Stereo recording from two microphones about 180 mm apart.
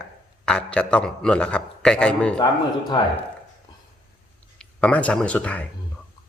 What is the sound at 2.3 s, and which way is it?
Speech, 25° left (ahead or behind).